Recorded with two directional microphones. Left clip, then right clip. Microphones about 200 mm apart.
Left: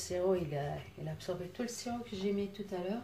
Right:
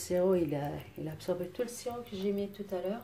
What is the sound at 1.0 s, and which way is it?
Speech, 45° right (ahead or behind).